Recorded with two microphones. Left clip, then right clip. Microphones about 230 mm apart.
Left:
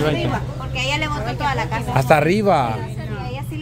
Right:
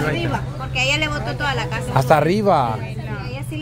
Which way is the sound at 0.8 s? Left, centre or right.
Centre.